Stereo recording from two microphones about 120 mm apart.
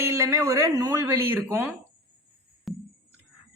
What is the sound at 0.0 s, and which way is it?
A man's voice, 25° right (ahead or behind).